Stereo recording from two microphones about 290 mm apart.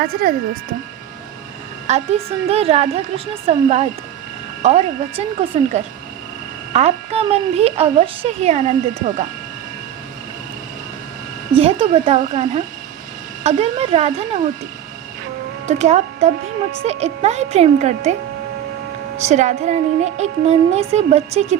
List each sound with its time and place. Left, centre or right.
0.0 s a woman's voice: right
1.9 s a woman's voice: right
11.5 s a woman's voice: centre
15.6 s a woman's voice: right
19.1 s a woman's voice: right